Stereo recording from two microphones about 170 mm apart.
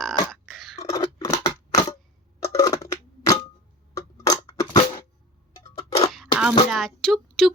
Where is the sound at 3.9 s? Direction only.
20° left (ahead or behind).